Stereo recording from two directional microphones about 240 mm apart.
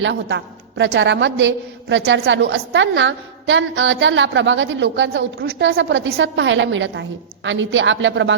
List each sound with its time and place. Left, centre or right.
0.0 s a woman's voice: right